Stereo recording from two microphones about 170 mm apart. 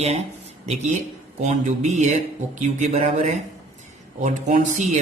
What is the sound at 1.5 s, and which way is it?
Speech, 45° right (ahead or behind).